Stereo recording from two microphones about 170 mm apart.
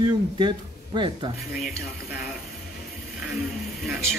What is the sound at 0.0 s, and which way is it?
Speech, 25° right (ahead or behind).